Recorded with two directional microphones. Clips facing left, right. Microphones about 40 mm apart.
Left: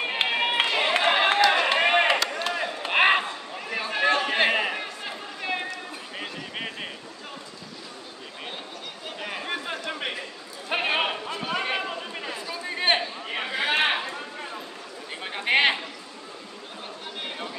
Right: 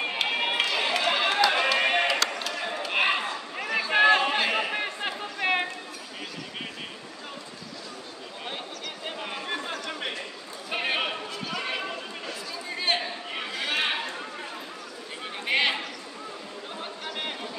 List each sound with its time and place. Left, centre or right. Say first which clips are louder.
0.1 s run: left 2 dB; left
2.8 s a sound: left 5 dB; left
3.9 s chatter: right 4 dB; right
4.4 s chatter: left 3 dB; left
4.7 s chatter: right 3 dB; right
9.3 s chatter: left 3 dB; centre
12.6 s a sound: left 4 dB; left
13.4 s chatter: left 5 dB; left
15.2 s a sound: left 4 dB; left